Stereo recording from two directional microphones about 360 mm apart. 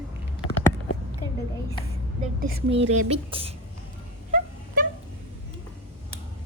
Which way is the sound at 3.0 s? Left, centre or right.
Centre.